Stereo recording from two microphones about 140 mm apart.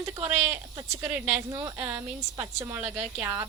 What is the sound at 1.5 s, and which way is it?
Speech, 30° right (ahead or behind).